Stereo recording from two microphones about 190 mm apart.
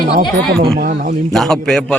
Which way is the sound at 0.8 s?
50° right (ahead or behind).